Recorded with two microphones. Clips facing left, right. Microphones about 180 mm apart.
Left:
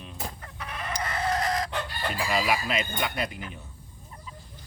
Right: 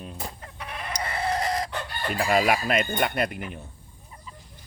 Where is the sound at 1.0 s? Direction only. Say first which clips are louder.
Right 1 dB; 30° right (ahead or behind).